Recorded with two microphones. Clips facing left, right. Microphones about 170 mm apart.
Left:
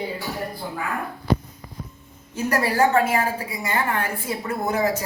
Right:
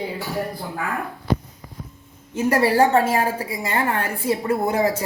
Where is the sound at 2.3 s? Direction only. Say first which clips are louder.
Right 4 dB; 30° right (ahead or behind).